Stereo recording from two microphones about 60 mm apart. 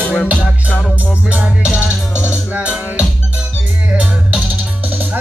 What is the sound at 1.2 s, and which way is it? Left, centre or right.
Music, centre.